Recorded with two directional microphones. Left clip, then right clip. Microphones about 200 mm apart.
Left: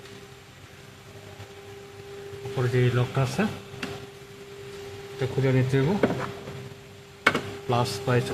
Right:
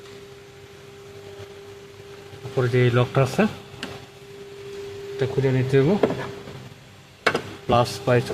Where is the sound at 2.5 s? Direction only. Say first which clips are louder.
Right 6 dB; 25° right (ahead or behind).